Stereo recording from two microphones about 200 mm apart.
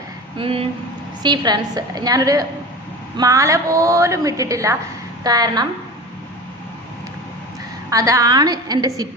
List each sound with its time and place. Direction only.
0.3 s a woman's voice: 30° right (ahead or behind)
7.9 s a woman's voice: 15° right (ahead or behind)